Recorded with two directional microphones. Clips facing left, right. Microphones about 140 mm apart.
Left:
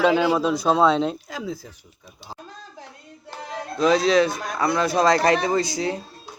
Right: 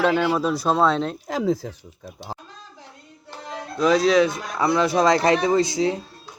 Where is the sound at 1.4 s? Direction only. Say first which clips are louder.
Right 9 dB; 75° right (ahead or behind).